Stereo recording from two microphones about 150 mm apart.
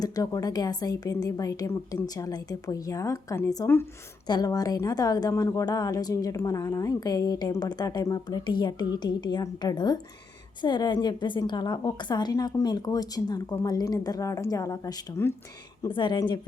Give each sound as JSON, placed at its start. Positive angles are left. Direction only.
{"t": 0.0, "sound": "a woman's voice", "side_deg": 25}